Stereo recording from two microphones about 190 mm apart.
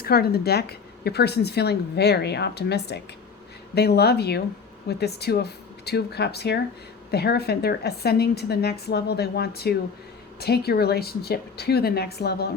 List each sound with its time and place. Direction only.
0.0 s speech: 55° left (ahead or behind)